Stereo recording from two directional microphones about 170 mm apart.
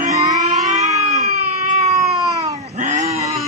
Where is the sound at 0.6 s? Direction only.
45° right (ahead or behind).